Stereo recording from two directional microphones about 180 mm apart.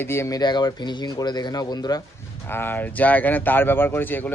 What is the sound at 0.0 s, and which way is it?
Speech, 15° left (ahead or behind).